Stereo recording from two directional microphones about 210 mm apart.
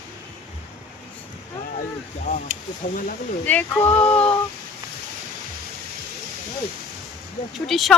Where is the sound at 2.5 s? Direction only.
35° right (ahead or behind).